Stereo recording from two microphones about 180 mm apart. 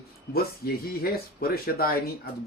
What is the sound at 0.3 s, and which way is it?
Speech, 55° left (ahead or behind).